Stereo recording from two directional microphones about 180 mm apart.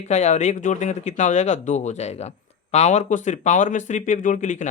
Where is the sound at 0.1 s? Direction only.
40° left (ahead or behind).